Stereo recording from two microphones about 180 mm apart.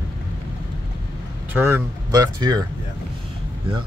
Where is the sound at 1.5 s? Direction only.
15° right (ahead or behind).